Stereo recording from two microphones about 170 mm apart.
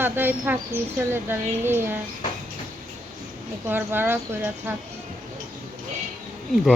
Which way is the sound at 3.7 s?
10° right (ahead or behind).